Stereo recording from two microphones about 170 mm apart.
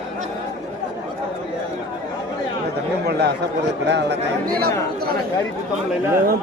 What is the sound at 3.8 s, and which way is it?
Speech, 85° right.